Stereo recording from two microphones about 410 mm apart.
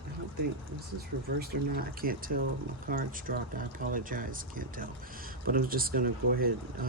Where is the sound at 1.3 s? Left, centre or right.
Right.